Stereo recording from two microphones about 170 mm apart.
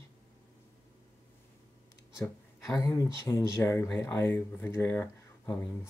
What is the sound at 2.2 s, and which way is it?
Speech, 15° left (ahead or behind).